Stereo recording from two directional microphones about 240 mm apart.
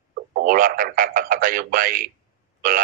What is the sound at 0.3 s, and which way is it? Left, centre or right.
Speech, right.